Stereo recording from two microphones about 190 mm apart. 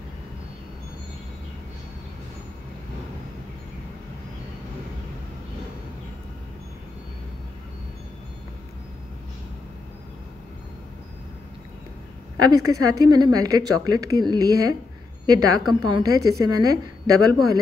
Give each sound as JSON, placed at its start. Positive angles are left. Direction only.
{"t": 12.4, "sound": "a woman's voice", "side_deg": -20}